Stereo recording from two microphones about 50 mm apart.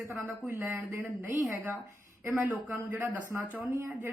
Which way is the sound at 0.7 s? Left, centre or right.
Right.